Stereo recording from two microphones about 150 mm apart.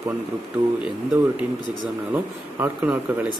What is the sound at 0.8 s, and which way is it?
A man's voice, 10° right (ahead or behind).